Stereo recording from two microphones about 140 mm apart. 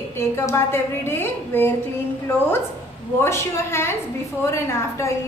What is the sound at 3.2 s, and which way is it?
A woman's voice, 20° left (ahead or behind).